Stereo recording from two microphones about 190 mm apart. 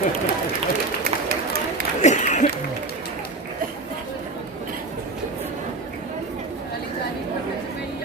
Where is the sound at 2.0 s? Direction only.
40° left (ahead or behind).